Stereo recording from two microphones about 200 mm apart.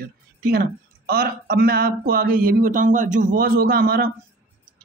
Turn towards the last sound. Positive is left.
turn(degrees=-50)  # may be behind; listen again after turning